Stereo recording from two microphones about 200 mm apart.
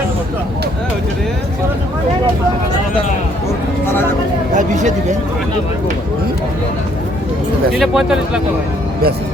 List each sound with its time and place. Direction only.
4.5 s chatter: 35° right (ahead or behind)
7.8 s speech: 5° right (ahead or behind)